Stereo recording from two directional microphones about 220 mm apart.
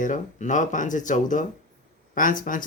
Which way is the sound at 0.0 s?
35° left (ahead or behind).